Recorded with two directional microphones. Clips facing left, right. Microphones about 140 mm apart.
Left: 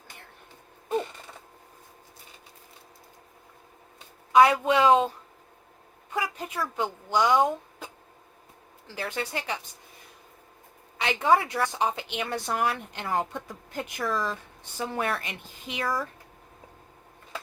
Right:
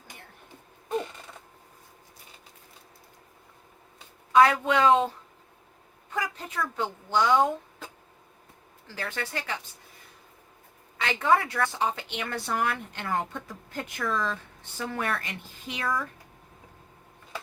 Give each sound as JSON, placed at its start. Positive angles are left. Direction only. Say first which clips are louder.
{"t": 4.3, "sound": "a sound", "louder": "left 1 dB", "side_deg": 15}
{"t": 4.6, "sound": "a woman's voice", "louder": "left 1 dB", "side_deg": 20}
{"t": 6.1, "sound": "speech", "louder": "left 2 dB", "side_deg": 15}
{"t": 9.0, "sound": "a woman's voice", "louder": "left 2 dB", "side_deg": 15}
{"t": 10.9, "sound": "a woman's voice", "louder": "left 1 dB", "side_deg": 15}
{"t": 15.8, "sound": "speech", "louder": "left 1 dB", "side_deg": 35}